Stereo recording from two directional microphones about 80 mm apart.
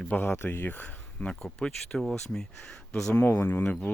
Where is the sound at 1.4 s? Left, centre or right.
Centre.